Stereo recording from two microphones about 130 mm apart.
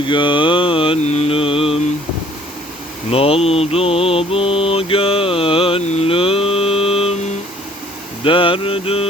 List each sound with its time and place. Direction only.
0.1 s mantra: 40° left (ahead or behind)
1.0 s mantra: 55° left (ahead or behind)
3.1 s mantra: 50° left (ahead or behind)
8.2 s mantra: 40° left (ahead or behind)